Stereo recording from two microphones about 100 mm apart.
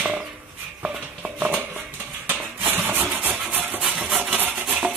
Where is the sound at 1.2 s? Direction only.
15° right (ahead or behind).